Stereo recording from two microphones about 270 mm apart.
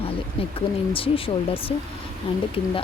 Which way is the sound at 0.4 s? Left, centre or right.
Centre.